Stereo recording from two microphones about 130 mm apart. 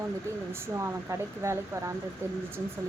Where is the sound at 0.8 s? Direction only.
20° right (ahead or behind).